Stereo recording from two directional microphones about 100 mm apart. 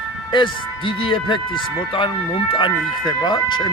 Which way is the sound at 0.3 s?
55° left (ahead or behind).